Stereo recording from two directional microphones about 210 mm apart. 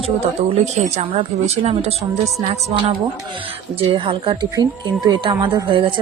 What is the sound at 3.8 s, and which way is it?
Speech, 25° right (ahead or behind).